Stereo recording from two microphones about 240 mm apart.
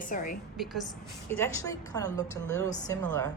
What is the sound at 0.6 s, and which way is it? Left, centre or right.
A woman's voice, centre.